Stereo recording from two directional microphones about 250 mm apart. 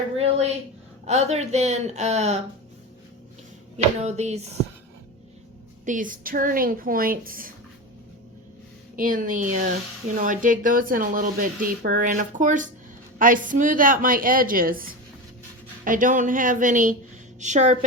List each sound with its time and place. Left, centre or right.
0.2 s speech: right
3.8 s speech: right
5.8 s speech: right
9.0 s speech: right